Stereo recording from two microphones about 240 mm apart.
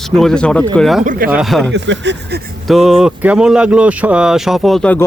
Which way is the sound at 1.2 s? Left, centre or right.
Centre.